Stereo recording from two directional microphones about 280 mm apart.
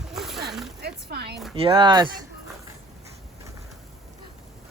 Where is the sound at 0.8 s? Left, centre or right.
Right.